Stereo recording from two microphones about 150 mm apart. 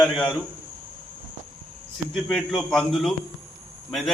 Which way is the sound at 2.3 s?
Centre (ahead or behind).